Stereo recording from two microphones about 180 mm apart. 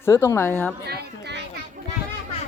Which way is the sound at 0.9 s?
70° right (ahead or behind).